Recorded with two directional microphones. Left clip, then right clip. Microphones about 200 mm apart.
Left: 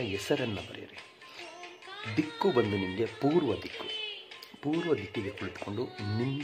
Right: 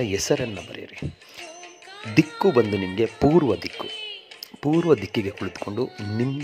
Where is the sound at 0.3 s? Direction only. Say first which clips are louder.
Right 6 dB; 25° right (ahead or behind).